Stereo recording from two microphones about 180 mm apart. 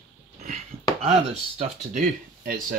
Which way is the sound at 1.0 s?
35° right (ahead or behind).